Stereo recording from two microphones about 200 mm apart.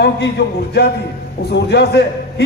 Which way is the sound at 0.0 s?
55° left (ahead or behind).